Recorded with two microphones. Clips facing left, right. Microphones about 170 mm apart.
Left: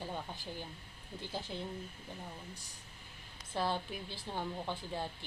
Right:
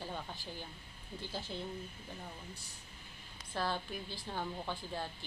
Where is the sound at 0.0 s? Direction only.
15° left (ahead or behind).